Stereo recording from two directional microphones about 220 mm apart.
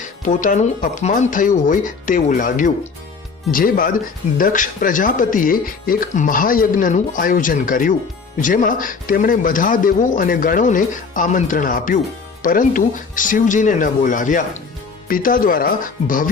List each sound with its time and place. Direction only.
0.3 s speech: 35° left (ahead or behind)